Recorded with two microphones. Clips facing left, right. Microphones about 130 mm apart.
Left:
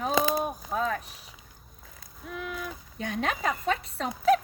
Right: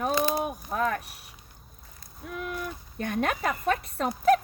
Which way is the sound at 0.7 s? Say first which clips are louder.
Right 2 dB; 65° right (ahead or behind).